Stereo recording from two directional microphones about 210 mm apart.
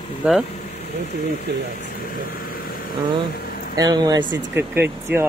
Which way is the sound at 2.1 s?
45° left (ahead or behind).